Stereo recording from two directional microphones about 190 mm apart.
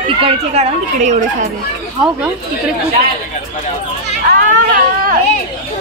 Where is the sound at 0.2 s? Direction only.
30° right (ahead or behind).